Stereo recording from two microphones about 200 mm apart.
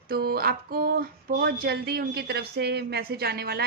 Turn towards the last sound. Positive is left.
turn(degrees=-50)  # may be behind; listen again after turning